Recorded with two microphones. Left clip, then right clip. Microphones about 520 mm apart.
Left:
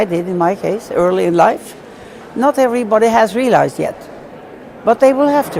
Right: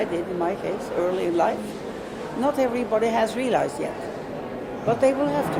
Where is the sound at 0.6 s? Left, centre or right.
Left.